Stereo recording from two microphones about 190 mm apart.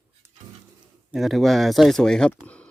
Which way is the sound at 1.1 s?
Centre (ahead or behind).